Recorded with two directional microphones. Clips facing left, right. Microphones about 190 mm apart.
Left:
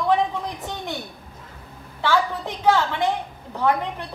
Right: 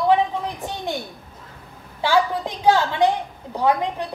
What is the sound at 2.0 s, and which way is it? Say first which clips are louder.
A woman's voice: right 2 dB; 10° right (ahead or behind).